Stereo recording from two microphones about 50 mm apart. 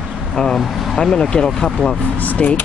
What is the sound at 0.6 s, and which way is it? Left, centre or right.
Speech, centre.